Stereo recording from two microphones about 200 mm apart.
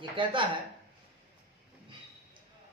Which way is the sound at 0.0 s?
25° right (ahead or behind).